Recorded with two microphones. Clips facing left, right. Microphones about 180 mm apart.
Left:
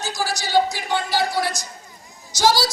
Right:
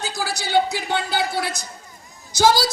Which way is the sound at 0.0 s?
60° right (ahead or behind).